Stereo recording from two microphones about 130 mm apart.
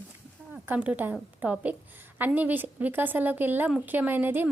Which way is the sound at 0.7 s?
10° right (ahead or behind).